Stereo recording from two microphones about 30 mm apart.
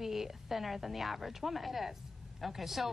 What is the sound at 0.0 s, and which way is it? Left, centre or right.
Speech, centre.